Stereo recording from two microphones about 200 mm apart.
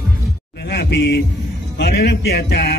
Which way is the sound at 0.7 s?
55° left (ahead or behind).